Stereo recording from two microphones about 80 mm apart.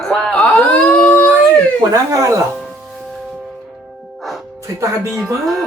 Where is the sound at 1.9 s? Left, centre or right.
Right.